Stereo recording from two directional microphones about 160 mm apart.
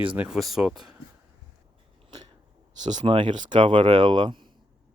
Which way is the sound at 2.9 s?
30° right (ahead or behind).